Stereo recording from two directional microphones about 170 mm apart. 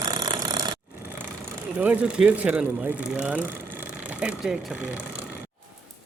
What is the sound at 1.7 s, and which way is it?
Speech, 10° right (ahead or behind).